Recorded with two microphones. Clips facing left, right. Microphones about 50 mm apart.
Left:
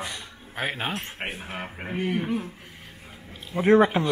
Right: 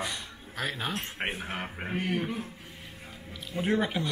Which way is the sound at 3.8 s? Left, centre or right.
Left.